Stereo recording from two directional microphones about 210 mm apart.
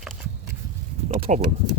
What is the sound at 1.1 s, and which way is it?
Speech, 25° right (ahead or behind).